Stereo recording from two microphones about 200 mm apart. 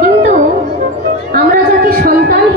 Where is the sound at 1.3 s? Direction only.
50° right (ahead or behind).